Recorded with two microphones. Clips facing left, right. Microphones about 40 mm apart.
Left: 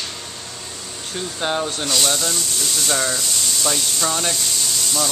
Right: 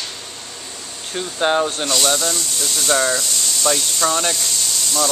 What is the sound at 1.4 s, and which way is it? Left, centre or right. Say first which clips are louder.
Speech: right 6 dB; centre.